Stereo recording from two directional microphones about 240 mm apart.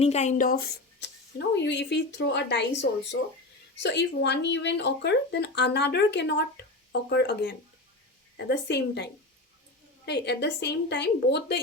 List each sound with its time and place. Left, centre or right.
0.0 s speech: left
10.1 s speech: left